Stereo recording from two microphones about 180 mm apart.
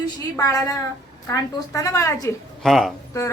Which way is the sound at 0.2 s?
20° left (ahead or behind).